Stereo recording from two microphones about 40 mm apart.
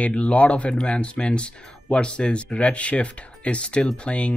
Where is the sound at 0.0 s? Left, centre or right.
Left.